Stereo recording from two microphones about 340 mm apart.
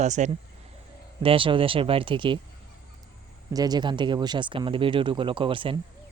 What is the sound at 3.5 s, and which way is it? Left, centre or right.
Speech, centre.